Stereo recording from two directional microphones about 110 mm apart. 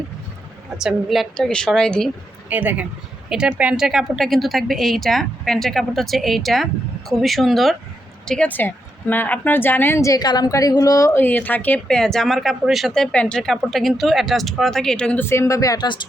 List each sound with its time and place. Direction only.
0.8 s a woman's voice: 5° right (ahead or behind)
2.5 s a woman's voice: 15° right (ahead or behind)
8.3 s speech: 10° left (ahead or behind); by 11.2 s 30° left (ahead or behind)
11.2 s speech: 15° left (ahead or behind)
11.9 s a woman's voice: 5° left (ahead or behind)
15.2 s speech: 25° left (ahead or behind)